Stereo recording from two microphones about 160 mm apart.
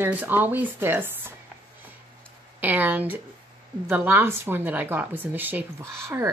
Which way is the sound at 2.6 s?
10° right (ahead or behind).